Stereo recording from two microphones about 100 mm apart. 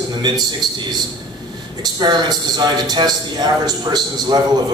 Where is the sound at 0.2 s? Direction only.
50° right (ahead or behind).